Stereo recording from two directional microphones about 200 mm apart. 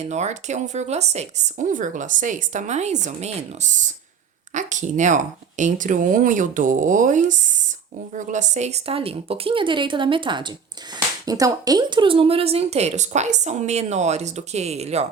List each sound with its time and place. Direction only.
0.0 s a woman's voice: 35° right (ahead or behind)